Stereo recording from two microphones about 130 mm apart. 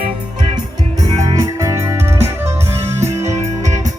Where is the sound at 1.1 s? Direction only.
40° right (ahead or behind).